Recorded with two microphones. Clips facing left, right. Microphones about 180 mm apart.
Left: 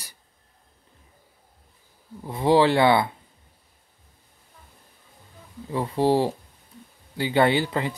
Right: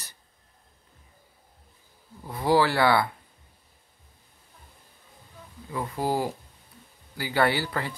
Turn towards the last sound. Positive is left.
turn(degrees=20)  # may be behind; listen again after turning